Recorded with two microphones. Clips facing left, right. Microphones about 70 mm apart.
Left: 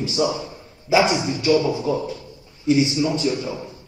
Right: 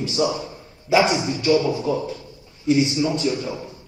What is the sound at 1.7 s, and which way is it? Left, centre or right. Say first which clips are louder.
Speech: even; left.